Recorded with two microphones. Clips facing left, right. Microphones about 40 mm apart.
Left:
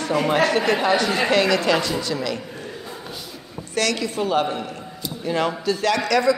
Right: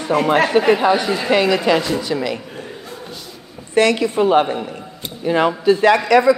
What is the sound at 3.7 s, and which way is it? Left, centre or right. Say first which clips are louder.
A woman's voice: right 8 dB; right.